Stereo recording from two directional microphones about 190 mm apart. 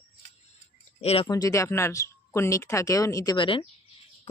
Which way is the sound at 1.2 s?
20° left (ahead or behind).